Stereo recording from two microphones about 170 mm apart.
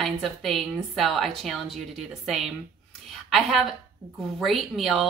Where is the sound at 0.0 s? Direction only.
Centre (ahead or behind).